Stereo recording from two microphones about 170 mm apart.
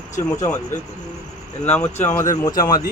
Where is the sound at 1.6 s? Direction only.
10° left (ahead or behind).